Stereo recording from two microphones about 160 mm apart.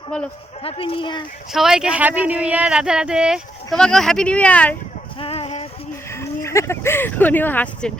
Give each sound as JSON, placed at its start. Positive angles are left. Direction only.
{"t": 0.6, "sound": "speech", "side_deg": 35}
{"t": 1.5, "sound": "speech", "side_deg": -5}
{"t": 5.2, "sound": "a sound", "side_deg": 35}
{"t": 6.1, "sound": "speech", "side_deg": 15}